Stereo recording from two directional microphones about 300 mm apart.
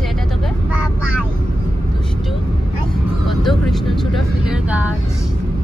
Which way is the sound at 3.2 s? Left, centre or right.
Centre.